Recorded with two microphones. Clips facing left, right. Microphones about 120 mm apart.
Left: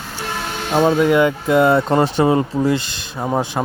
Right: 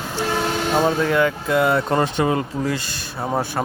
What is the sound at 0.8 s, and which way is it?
Speech, 15° left (ahead or behind).